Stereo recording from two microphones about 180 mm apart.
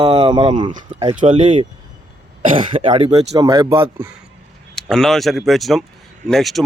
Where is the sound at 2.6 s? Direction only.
30° right (ahead or behind).